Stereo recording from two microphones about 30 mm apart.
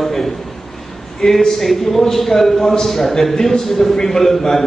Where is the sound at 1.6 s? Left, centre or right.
Centre.